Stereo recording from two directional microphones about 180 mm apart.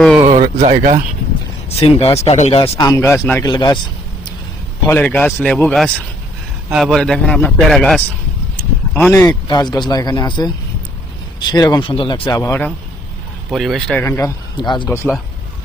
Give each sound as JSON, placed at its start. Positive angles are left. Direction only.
{"t": 0.2, "sound": "speech", "side_deg": -40}
{"t": 1.8, "sound": "speech", "side_deg": 35}
{"t": 2.7, "sound": "speech", "side_deg": 20}
{"t": 3.4, "sound": "speech", "side_deg": 25}
{"t": 4.9, "sound": "a man's voice", "side_deg": 10}
{"t": 9.1, "sound": "speech", "side_deg": 20}
{"t": 12.4, "sound": "speech", "side_deg": 15}
{"t": 13.5, "sound": "a man's voice", "side_deg": 0}
{"t": 14.0, "sound": "speech", "side_deg": 15}